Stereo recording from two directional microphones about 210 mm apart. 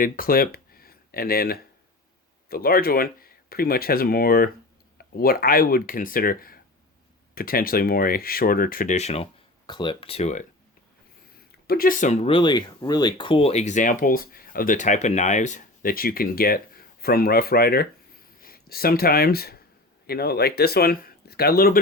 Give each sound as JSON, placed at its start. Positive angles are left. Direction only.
{"t": 0.0, "sound": "speech", "side_deg": 45}
{"t": 11.7, "sound": "speech", "side_deg": 40}